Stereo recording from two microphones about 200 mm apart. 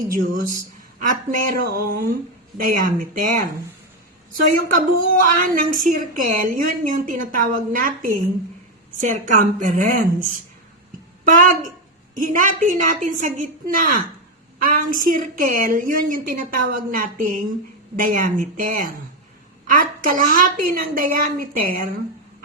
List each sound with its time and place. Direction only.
0.9 s a woman's voice: 40° right (ahead or behind)